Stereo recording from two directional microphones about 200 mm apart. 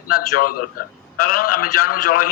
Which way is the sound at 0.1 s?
45° left (ahead or behind).